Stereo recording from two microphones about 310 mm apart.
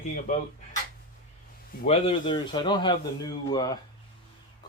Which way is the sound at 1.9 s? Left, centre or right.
Centre.